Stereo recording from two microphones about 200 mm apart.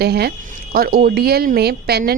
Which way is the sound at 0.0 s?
55° right (ahead or behind).